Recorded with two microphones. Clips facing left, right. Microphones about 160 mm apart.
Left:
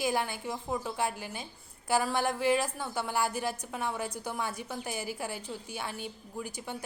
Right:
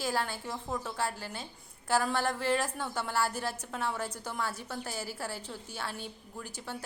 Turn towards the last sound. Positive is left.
turn(degrees=15)  # may be behind; listen again after turning